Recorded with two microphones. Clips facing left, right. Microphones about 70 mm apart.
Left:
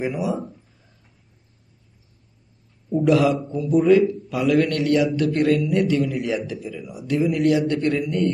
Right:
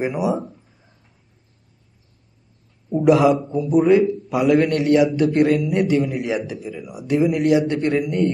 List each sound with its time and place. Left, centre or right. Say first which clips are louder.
0.0 s a man's voice: right 3 dB; right
2.9 s a man's voice: right 3 dB; right